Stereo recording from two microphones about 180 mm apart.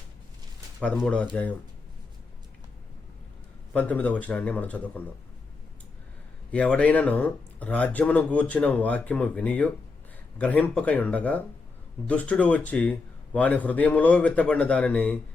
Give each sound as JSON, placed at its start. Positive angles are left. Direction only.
{"t": 0.9, "sound": "speech", "side_deg": 5}
{"t": 3.7, "sound": "speech", "side_deg": 10}
{"t": 6.5, "sound": "speech", "side_deg": 5}